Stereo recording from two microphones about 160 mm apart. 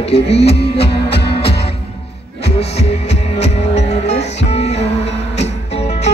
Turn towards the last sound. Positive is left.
turn(degrees=40)  # may be behind; listen again after turning